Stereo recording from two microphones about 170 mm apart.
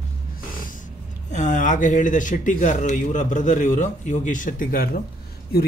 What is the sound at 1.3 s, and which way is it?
Speech, 50° left (ahead or behind).